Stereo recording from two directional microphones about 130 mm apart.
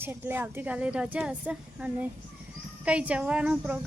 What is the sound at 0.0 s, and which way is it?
A woman's voice, 15° right (ahead or behind).